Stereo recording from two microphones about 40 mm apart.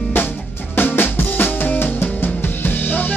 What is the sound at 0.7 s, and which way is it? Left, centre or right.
Drum, left.